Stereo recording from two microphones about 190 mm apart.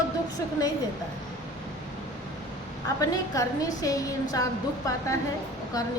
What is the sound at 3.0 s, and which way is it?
A woman's voice, 20° left (ahead or behind).